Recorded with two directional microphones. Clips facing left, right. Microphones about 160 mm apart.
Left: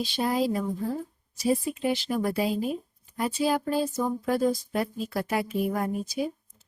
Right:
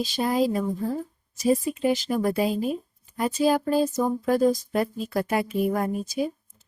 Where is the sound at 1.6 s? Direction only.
45° right (ahead or behind).